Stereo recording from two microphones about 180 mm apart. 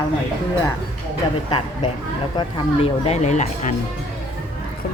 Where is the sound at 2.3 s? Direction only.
35° left (ahead or behind).